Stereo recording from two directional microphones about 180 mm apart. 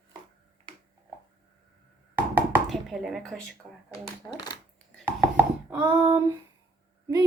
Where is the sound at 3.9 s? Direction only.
20° left (ahead or behind).